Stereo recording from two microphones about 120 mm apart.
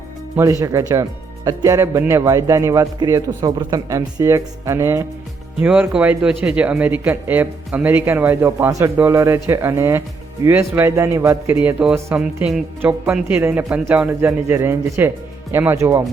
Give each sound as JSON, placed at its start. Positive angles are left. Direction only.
{"t": 0.6, "sound": "a man's voice", "side_deg": -30}
{"t": 5.5, "sound": "a man's voice", "side_deg": -10}